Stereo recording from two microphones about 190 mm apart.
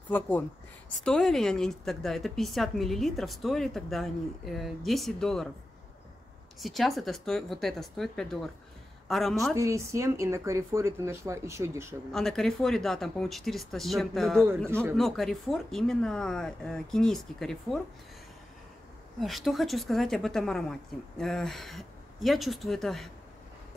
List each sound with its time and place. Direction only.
0.8 s a woman's voice: 5° left (ahead or behind)
6.6 s a woman's voice: centre (ahead or behind)
9.6 s speech: 15° right (ahead or behind)
12.1 s a woman's voice: centre (ahead or behind)
19.1 s a woman's voice: centre (ahead or behind)